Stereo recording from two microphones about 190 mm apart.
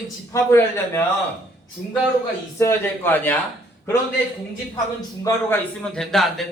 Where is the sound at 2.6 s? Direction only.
10° left (ahead or behind).